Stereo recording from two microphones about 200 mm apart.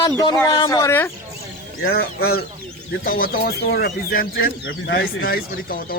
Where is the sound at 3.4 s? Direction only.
50° left (ahead or behind).